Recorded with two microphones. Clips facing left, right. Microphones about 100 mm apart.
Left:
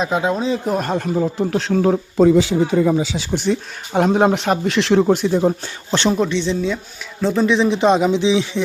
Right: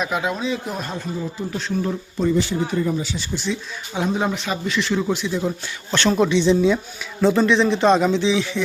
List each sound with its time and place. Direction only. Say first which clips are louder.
0.0 s speech: left 4 dB; 30° left (ahead or behind); by 3.4 s 90° left
3.4 s speech: left 6 dB; 55° left (ahead or behind); by 5.0 s 75° left (ahead or behind)
5.0 s speech: left 7 dB; 50° left (ahead or behind)
6.1 s speech: right 2 dB; 10° right (ahead or behind)
7.4 s speech: left 5 dB; 10° left (ahead or behind)